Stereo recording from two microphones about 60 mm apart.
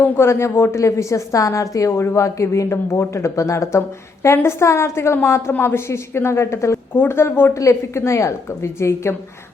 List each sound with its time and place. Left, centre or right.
0.0 s a woman's voice: left
6.9 s speech: left
7.5 s a woman's voice: left